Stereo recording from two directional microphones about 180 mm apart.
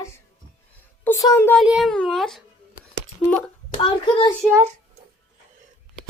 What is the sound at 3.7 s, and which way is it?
Speech, 30° left (ahead or behind).